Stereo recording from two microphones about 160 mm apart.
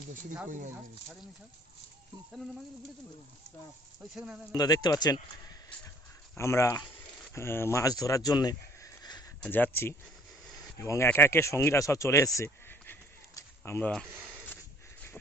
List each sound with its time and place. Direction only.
0.4 s speech: 55° right (ahead or behind)
4.1 s speech: 5° right (ahead or behind)
4.5 s speech: 25° left (ahead or behind)
6.3 s speech: 15° left (ahead or behind)
9.4 s speech: 10° left (ahead or behind)